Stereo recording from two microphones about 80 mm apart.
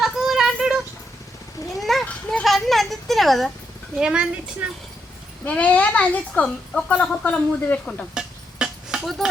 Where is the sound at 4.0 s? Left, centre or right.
Centre.